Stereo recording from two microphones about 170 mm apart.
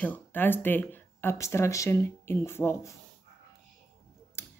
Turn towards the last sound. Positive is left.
turn(degrees=15)  # may be behind; listen again after turning